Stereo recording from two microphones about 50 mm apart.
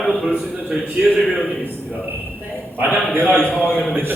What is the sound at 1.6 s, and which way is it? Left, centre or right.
A man's voice, right.